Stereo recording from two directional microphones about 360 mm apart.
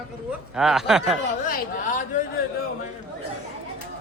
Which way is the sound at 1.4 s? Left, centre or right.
Left.